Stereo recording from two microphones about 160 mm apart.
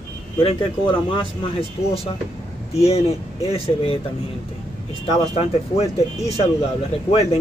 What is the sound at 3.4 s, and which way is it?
Speech, 35° left (ahead or behind).